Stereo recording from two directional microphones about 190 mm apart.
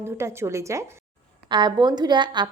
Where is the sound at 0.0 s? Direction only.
15° right (ahead or behind).